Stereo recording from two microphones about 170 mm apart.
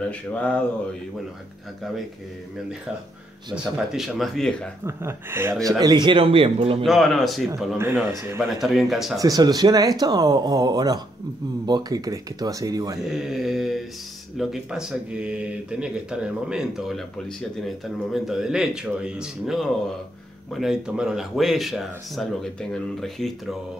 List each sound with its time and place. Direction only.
0.1 s a sound: 10° left (ahead or behind)
3.5 s speech: 5° right (ahead or behind)
4.8 s speech: 15° right (ahead or behind); by 6.8 s 30° right (ahead or behind)
6.8 s speech: centre (ahead or behind)
7.7 s a man's voice: 15° right (ahead or behind)
8.5 s speech: centre (ahead or behind)
9.2 s speech: 20° right (ahead or behind)
13.1 s speech: centre (ahead or behind)